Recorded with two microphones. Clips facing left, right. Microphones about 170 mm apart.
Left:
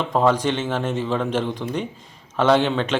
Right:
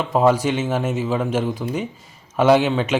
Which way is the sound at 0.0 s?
5° right (ahead or behind).